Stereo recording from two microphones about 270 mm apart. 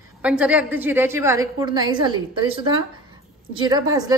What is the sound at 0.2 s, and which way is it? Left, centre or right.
A woman's voice, centre.